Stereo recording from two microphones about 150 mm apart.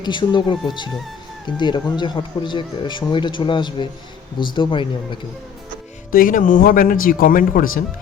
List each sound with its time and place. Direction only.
0.0 s speech: 30° left (ahead or behind)
1.5 s speech: 30° left (ahead or behind)
6.1 s speech: 65° left (ahead or behind)